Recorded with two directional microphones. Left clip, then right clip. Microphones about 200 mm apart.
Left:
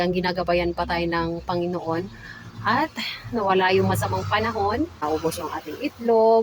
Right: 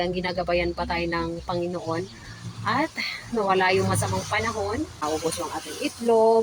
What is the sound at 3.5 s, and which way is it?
Speech, 10° left (ahead or behind).